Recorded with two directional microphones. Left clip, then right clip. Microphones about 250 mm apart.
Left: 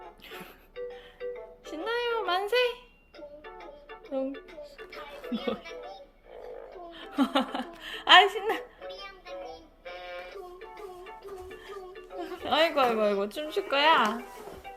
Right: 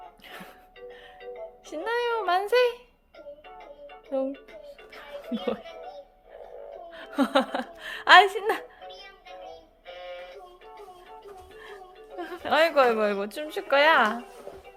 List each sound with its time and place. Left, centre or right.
1.6 s music: right
4.1 s music: right
6.9 s speech: centre
9.8 s music: centre
12.2 s a woman's voice: centre